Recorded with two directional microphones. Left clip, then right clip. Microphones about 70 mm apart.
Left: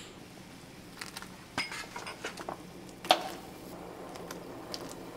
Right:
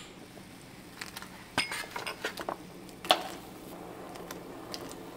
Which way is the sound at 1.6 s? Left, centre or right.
Right.